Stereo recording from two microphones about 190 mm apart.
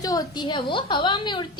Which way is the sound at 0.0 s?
20° left (ahead or behind).